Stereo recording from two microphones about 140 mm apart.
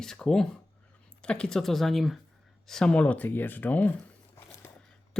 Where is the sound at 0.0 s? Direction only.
5° left (ahead or behind).